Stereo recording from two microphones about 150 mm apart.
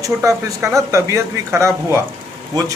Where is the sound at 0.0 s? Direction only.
20° right (ahead or behind).